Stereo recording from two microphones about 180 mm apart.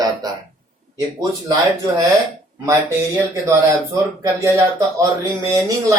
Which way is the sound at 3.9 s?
20° right (ahead or behind).